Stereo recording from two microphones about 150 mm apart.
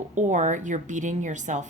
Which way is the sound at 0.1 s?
55° right (ahead or behind).